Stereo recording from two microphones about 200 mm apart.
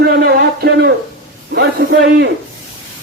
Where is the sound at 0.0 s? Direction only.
55° right (ahead or behind).